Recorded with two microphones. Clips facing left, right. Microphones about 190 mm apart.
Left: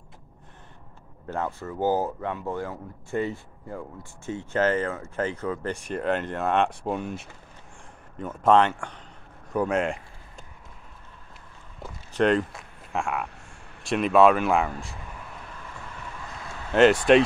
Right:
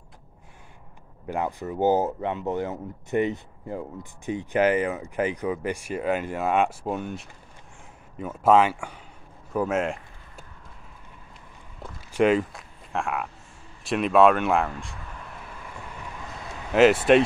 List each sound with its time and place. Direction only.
1.2 s speech: 15° right (ahead or behind)
9.5 s a sound: centre (ahead or behind)
12.1 s speech: 5° right (ahead or behind)
16.7 s speech: 5° right (ahead or behind)